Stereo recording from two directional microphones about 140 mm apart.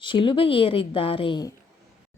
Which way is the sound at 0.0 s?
35° left (ahead or behind).